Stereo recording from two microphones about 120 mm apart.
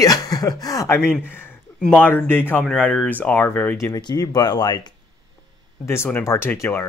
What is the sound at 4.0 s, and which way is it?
Speech, 35° left (ahead or behind).